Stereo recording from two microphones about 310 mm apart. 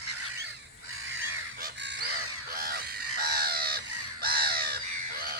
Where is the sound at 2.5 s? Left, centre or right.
Right.